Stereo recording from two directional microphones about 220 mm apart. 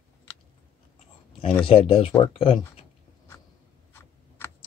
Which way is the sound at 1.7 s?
25° left (ahead or behind).